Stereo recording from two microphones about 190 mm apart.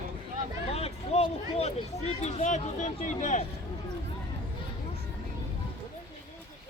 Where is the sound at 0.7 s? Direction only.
35° left (ahead or behind).